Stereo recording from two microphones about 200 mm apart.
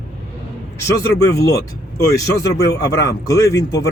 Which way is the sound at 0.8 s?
15° left (ahead or behind).